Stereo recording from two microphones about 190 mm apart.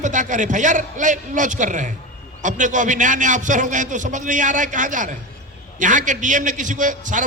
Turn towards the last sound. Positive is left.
turn(degrees=-45)  # may be behind; listen again after turning